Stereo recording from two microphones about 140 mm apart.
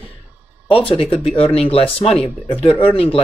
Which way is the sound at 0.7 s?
40° left (ahead or behind).